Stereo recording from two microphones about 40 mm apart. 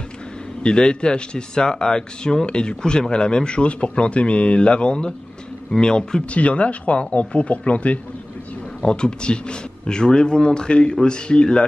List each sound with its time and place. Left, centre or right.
0.6 s speech: left
6.3 s speech: left
8.8 s speech: left